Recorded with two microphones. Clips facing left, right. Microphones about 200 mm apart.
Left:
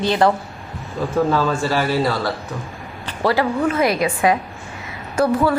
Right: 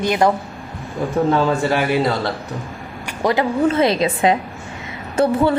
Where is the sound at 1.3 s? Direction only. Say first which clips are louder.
Right 2 dB; 20° right (ahead or behind).